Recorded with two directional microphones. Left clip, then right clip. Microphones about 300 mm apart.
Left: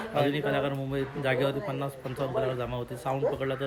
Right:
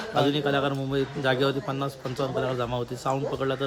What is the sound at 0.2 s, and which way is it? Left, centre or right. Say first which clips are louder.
Speech: right 3 dB; centre.